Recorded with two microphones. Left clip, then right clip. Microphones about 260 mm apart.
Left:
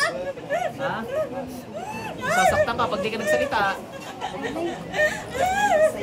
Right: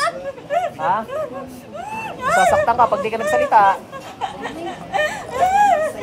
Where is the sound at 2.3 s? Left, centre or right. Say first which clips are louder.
Right 5 dB; right.